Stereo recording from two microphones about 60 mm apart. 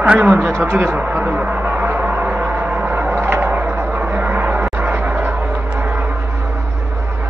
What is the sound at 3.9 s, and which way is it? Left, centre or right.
Vehicle, right.